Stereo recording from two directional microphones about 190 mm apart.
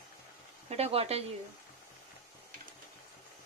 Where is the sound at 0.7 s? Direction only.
30° right (ahead or behind).